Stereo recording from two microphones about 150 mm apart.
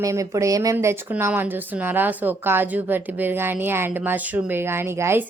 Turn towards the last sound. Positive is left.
turn(degrees=-15)  # may be behind; listen again after turning